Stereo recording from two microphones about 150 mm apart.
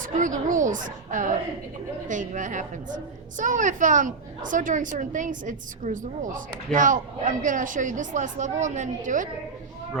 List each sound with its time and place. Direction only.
0.1 s a woman's voice: 60° right (ahead or behind)